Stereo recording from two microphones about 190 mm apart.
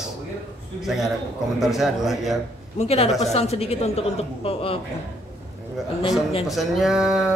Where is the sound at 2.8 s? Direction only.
35° left (ahead or behind).